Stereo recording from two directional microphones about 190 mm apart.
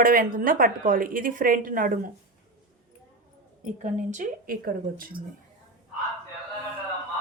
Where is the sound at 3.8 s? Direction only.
40° right (ahead or behind).